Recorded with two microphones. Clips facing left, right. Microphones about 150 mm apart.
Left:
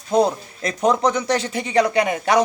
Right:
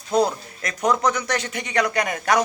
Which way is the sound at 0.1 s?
25° left (ahead or behind).